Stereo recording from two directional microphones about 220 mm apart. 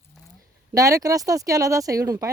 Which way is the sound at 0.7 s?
15° right (ahead or behind).